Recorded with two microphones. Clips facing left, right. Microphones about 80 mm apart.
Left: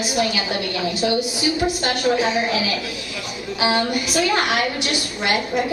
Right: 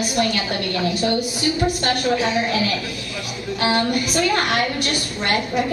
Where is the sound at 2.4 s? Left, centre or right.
Centre.